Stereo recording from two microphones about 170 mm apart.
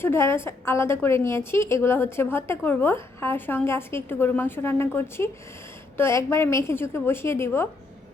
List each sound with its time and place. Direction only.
0.0 s a woman's voice: 15° left (ahead or behind)